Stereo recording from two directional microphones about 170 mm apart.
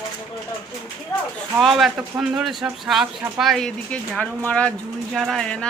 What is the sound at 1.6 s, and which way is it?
Speech, centre (ahead or behind).